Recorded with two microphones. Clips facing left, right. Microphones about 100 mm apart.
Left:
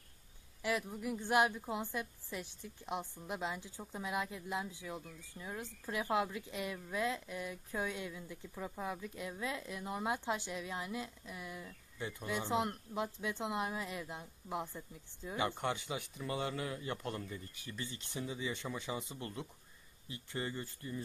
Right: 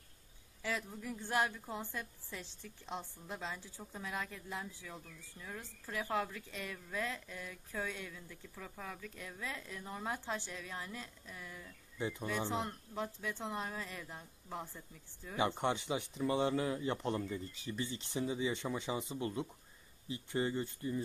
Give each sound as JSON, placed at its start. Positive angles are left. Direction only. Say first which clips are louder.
{"t": 0.6, "sound": "a woman's voice", "louder": "left 3 dB", "side_deg": 15}
{"t": 12.0, "sound": "speech", "louder": "right 4 dB", "side_deg": -20}
{"t": 12.3, "sound": "a woman's voice", "louder": "left 5 dB", "side_deg": 15}
{"t": 15.3, "sound": "speech", "louder": "right 2 dB", "side_deg": -20}